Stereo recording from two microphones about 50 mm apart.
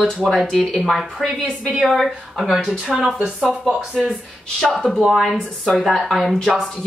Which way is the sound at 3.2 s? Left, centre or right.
Centre.